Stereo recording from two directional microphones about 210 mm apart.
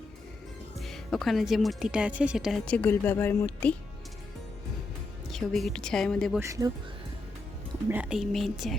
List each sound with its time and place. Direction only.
0.8 s speech: centre (ahead or behind)
5.3 s speech: centre (ahead or behind)
6.4 s speech: 15° right (ahead or behind)
7.9 s speech: 5° right (ahead or behind)